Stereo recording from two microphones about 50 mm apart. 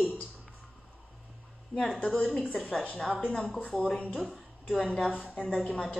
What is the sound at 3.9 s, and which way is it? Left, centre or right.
Speech, left.